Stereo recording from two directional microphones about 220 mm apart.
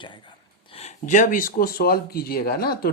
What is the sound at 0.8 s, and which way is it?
Speech, 30° left (ahead or behind).